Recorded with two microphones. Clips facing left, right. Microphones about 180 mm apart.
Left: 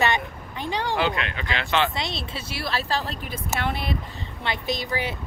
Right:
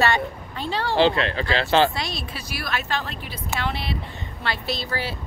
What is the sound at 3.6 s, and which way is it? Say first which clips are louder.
Speech: left 1 dB; 50° left (ahead or behind).